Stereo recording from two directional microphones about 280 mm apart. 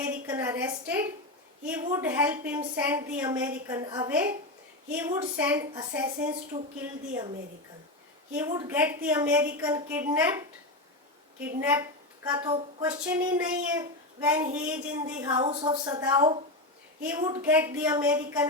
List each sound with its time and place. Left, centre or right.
0.1 s speech: centre
8.4 s speech: centre
12.3 s a man's voice: centre